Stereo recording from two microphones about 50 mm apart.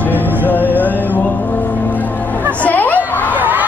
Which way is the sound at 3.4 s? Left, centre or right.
Right.